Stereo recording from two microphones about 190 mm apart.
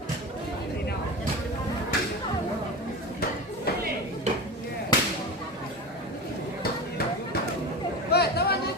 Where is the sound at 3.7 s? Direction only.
55° left (ahead or behind).